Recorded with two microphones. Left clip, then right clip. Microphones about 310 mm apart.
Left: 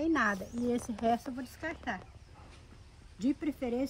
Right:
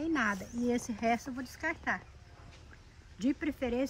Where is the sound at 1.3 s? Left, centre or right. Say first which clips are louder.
Right 3 dB; centre.